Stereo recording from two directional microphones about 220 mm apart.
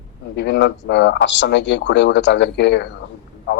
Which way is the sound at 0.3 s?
50° left (ahead or behind).